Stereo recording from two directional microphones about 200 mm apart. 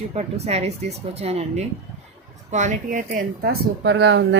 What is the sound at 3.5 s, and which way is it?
Speech, 60° right (ahead or behind).